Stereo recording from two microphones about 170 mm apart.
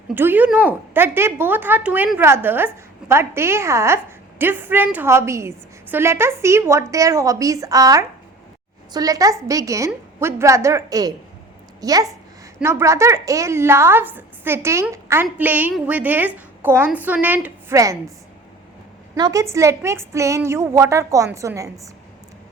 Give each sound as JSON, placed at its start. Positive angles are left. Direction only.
{"t": 0.1, "sound": "a woman's voice", "side_deg": -10}
{"t": 19.1, "sound": "speech", "side_deg": -20}